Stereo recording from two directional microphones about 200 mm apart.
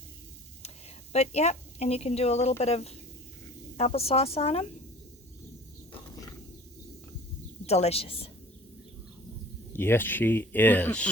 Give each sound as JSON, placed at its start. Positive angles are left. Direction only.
{"t": 1.1, "sound": "speech", "side_deg": 30}
{"t": 7.7, "sound": "a woman's voice", "side_deg": 30}
{"t": 9.7, "sound": "speech", "side_deg": 10}